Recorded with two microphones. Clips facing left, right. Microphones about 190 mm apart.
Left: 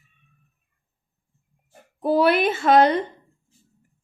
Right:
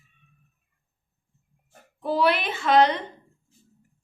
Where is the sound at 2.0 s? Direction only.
50° left (ahead or behind).